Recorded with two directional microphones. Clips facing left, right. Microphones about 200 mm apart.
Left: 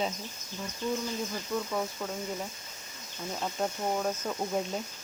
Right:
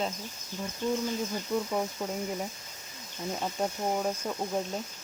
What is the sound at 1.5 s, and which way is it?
Speech, 20° right (ahead or behind).